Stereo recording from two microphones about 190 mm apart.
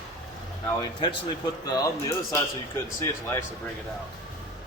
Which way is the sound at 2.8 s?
15° left (ahead or behind).